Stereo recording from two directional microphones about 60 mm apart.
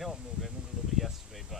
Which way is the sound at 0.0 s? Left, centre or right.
Centre.